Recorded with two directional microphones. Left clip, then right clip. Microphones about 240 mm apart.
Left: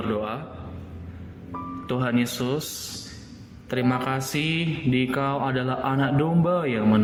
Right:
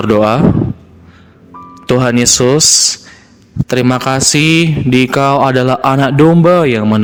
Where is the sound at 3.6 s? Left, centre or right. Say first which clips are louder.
Right 12 dB; right.